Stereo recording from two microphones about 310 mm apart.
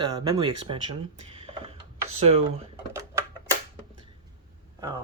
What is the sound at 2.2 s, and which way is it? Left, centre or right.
Speech, centre.